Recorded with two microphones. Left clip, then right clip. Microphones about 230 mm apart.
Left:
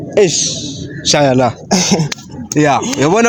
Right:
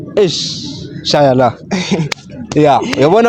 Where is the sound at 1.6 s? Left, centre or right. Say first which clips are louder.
Left 4 dB; left.